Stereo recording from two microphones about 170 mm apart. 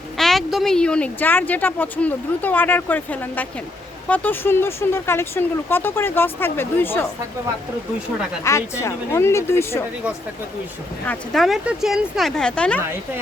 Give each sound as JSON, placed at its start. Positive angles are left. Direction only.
{"t": 0.2, "sound": "speech", "side_deg": 0}
{"t": 8.4, "sound": "speech", "side_deg": 15}
{"t": 11.0, "sound": "speech", "side_deg": 5}